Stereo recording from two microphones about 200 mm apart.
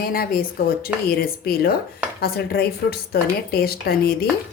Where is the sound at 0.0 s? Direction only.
50° left (ahead or behind).